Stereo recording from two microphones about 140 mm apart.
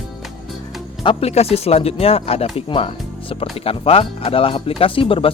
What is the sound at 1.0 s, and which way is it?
Speech, 45° left (ahead or behind).